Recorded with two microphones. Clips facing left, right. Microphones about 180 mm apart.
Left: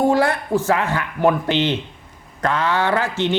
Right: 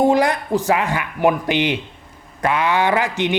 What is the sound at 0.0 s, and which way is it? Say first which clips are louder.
A man's voice: right 1 dB; 15° right (ahead or behind).